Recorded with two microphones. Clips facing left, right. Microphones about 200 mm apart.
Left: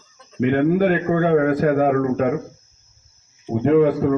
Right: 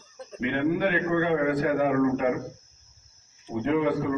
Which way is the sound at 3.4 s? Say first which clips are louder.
Left 9 dB; 50° left (ahead or behind).